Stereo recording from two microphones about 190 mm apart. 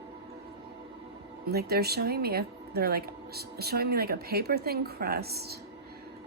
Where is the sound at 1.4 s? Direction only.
55° right (ahead or behind).